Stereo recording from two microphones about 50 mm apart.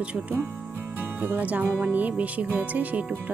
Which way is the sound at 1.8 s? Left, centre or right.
Right.